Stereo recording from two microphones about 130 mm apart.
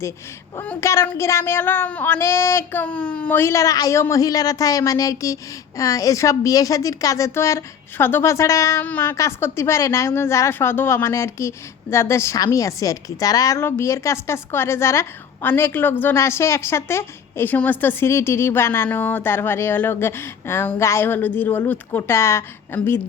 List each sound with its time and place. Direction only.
0.8 s a woman's voice: 20° left (ahead or behind)